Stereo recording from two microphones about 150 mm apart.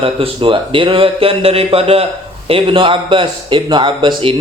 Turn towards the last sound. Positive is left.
turn(degrees=-35)  # may be behind; listen again after turning